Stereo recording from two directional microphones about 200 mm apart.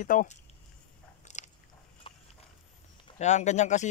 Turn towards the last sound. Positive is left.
turn(degrees=35)  # may be behind; listen again after turning